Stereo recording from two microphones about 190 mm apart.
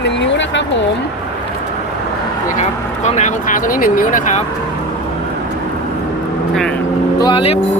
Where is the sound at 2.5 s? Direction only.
40° left (ahead or behind).